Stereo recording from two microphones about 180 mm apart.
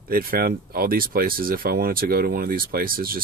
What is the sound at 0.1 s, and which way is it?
Speech, 55° right (ahead or behind).